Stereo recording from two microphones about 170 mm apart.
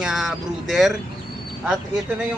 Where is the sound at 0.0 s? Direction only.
Centre (ahead or behind).